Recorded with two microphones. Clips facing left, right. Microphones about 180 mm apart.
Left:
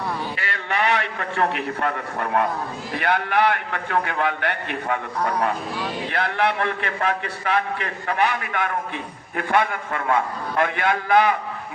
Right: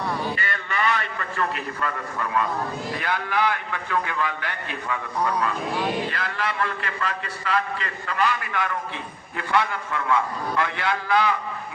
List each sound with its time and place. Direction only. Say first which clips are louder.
0.3 s a man's voice: left 3 dB; 75° left (ahead or behind); by 11.3 s 55° left (ahead or behind)